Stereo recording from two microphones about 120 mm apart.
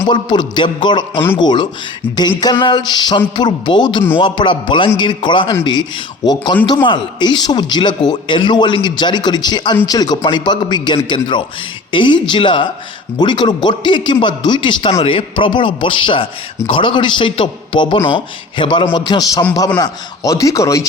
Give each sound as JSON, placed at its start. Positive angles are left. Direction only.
{"t": 0.1, "sound": "a man's voice", "side_deg": 40}